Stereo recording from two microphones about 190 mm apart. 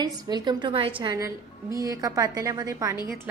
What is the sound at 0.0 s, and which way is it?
A woman's voice, 25° right (ahead or behind).